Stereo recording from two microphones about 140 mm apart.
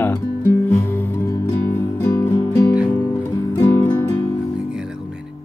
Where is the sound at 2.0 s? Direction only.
25° left (ahead or behind).